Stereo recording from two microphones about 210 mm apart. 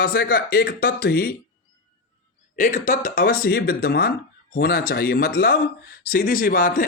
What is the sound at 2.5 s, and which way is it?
Speech, 40° left (ahead or behind).